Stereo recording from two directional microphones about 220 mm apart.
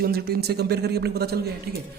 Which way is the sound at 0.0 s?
45° right (ahead or behind).